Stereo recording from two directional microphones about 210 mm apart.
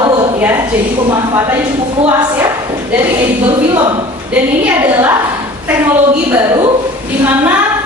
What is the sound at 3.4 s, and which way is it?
Speech, 25° right (ahead or behind).